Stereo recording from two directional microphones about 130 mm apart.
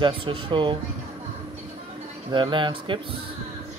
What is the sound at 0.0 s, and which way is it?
Speech, 40° right (ahead or behind).